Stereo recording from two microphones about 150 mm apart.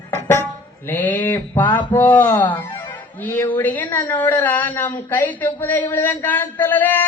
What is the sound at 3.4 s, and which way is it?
A woman's voice, 15° left (ahead or behind).